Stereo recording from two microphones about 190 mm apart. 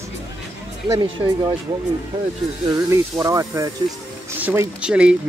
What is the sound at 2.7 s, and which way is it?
Speech, 15° right (ahead or behind).